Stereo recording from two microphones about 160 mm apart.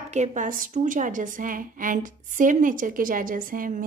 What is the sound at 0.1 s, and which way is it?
A woman's voice, 50° right (ahead or behind).